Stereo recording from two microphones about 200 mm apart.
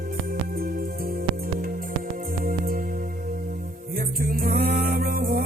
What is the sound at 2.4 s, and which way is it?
Music, 45° right (ahead or behind).